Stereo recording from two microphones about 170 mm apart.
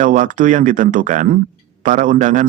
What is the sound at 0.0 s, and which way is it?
A man's voice, 45° right (ahead or behind).